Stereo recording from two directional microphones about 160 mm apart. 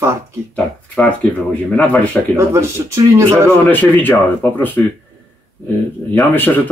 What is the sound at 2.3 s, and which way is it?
Speech, 15° right (ahead or behind).